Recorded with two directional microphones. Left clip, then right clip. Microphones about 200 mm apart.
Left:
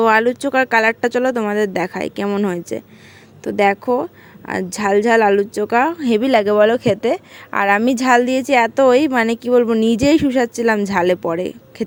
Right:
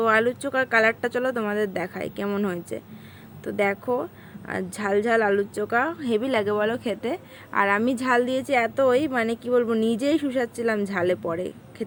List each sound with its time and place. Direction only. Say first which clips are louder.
0.0 s speech: left 7 dB; 45° left (ahead or behind)